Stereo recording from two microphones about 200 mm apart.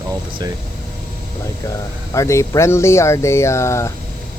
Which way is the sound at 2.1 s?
15° left (ahead or behind).